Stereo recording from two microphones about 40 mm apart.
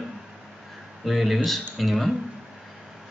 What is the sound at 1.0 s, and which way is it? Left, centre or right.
Speech, centre.